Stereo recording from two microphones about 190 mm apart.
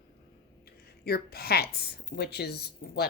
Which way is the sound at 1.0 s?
55° left (ahead or behind).